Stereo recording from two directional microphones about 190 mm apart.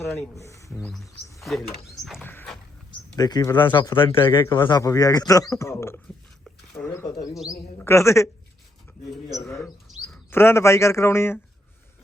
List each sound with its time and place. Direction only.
0.3 s speech: 15° left (ahead or behind)
0.8 s a woman's voice: 5° left (ahead or behind)
3.2 s a man's voice: 20° left (ahead or behind)
6.4 s a sound: 5° left (ahead or behind)
7.9 s a woman's voice: 15° left (ahead or behind)
10.1 s speech: 10° left (ahead or behind)